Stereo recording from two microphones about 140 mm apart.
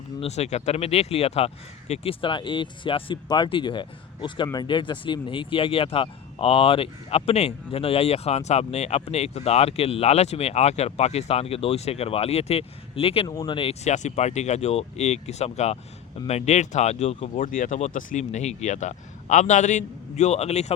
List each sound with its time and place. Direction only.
0.2 s speech: 50° left (ahead or behind)
13.2 s speech: 30° left (ahead or behind); by 17.3 s 50° left (ahead or behind)
17.3 s speech: 75° left (ahead or behind); by 20.7 s 50° left (ahead or behind)